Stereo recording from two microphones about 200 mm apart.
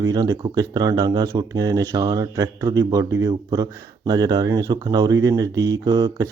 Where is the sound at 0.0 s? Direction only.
20° right (ahead or behind).